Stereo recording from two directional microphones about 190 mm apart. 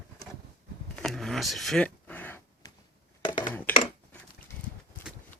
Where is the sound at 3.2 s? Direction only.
25° left (ahead or behind).